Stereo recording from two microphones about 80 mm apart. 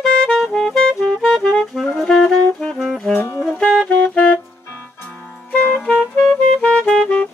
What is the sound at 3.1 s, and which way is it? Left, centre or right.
Saxophone, left.